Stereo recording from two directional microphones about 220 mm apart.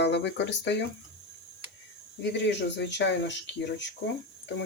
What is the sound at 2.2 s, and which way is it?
Speech, 50° left (ahead or behind).